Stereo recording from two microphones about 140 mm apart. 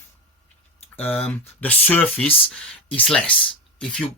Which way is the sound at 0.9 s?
10° left (ahead or behind).